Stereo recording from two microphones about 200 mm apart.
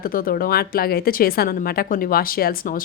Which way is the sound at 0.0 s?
45° left (ahead or behind).